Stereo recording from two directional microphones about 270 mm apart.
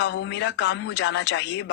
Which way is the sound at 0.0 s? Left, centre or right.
Left.